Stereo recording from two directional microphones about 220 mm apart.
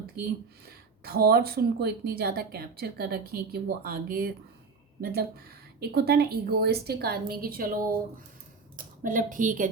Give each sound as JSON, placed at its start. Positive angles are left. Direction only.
{"t": 1.0, "sound": "a woman's voice", "side_deg": -45}
{"t": 8.7, "sound": "speech", "side_deg": -40}